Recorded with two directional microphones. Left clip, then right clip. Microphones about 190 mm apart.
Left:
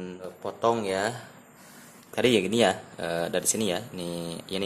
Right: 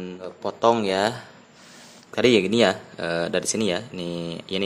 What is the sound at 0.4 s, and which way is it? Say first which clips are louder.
Speech: right 6 dB; 20° right (ahead or behind).